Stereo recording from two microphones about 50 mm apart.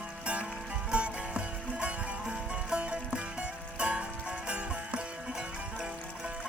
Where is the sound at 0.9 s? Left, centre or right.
Right.